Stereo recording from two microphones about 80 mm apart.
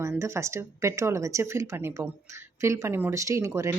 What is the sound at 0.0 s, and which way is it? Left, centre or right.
Speech, right.